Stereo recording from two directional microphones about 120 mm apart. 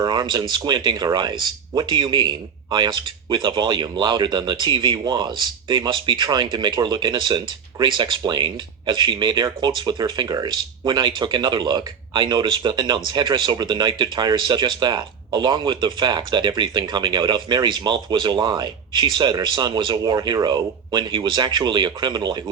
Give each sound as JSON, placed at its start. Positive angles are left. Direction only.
{"t": 0.0, "sound": "speech", "side_deg": -40}